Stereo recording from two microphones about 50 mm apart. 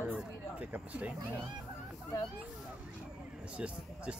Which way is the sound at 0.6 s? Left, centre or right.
Right.